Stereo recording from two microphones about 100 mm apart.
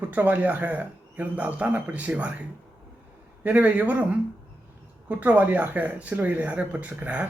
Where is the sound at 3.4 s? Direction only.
15° right (ahead or behind).